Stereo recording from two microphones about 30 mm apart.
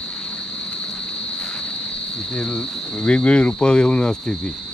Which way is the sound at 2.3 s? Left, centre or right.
Left.